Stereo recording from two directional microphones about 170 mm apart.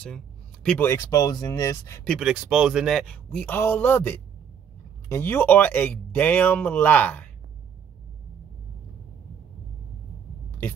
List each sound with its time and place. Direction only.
0.7 s speech: 15° left (ahead or behind)
2.0 s speech: 5° right (ahead or behind)
3.3 s speech: 10° left (ahead or behind)